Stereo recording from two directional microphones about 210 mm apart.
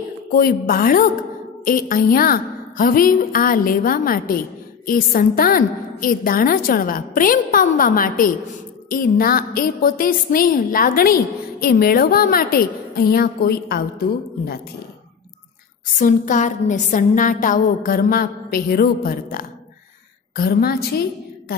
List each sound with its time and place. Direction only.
0.4 s a woman's voice: 45° left (ahead or behind)
16.0 s a woman's voice: 40° left (ahead or behind)